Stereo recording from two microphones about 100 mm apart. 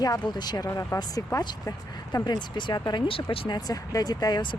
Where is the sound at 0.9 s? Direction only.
45° left (ahead or behind).